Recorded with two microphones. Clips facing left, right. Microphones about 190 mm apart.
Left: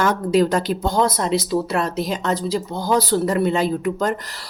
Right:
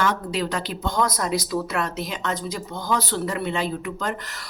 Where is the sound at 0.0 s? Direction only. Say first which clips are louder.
Left 7 dB; 45° left (ahead or behind).